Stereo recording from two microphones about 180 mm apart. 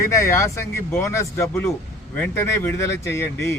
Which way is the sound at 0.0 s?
15° left (ahead or behind).